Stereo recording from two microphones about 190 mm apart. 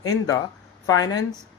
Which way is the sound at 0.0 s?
20° left (ahead or behind).